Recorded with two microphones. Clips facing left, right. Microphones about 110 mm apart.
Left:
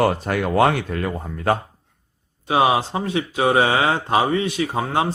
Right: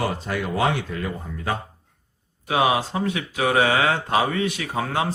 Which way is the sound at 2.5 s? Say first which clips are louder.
Left 3 dB; 30° left (ahead or behind).